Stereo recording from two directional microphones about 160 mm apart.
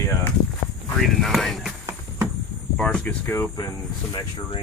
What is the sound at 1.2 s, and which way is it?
Speech, centre (ahead or behind).